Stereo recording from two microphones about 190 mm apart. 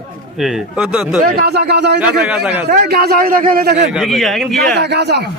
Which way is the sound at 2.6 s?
55° right (ahead or behind).